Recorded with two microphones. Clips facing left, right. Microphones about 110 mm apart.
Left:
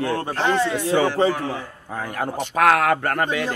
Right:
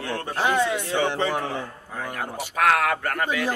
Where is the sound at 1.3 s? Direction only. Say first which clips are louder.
Left 2 dB; 25° right (ahead or behind).